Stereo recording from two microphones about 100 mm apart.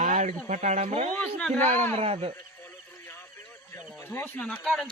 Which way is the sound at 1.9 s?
85° right.